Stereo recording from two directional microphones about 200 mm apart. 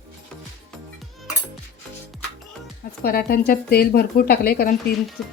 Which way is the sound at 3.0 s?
50° left (ahead or behind).